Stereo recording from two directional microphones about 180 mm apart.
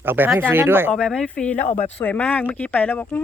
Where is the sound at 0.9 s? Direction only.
5° left (ahead or behind).